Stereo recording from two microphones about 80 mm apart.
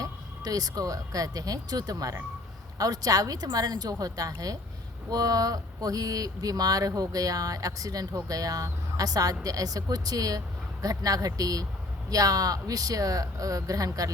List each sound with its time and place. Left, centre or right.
0.0 s speech: right